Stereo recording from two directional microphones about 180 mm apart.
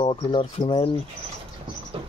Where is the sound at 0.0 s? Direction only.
25° left (ahead or behind).